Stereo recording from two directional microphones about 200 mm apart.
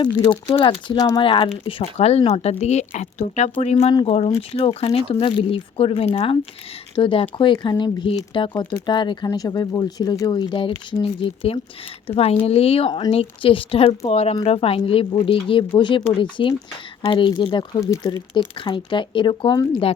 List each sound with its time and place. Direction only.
0.0 s speech: 20° left (ahead or behind)